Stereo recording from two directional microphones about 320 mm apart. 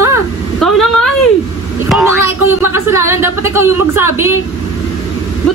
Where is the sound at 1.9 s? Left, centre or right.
Centre.